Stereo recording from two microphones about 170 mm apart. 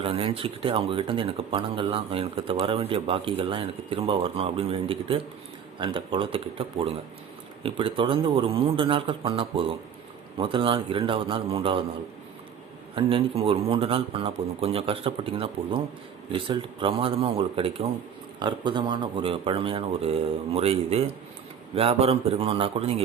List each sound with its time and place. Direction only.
0.0 s speech: 30° right (ahead or behind)
13.0 s speech: 30° right (ahead or behind)